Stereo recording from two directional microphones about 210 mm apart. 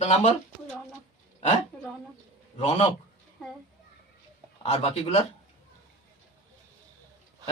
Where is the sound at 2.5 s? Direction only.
30° left (ahead or behind).